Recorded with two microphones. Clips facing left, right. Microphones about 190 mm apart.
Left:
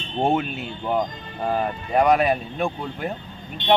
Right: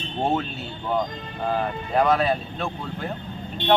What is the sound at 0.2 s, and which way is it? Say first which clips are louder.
Speech: left 3 dB; 15° left (ahead or behind).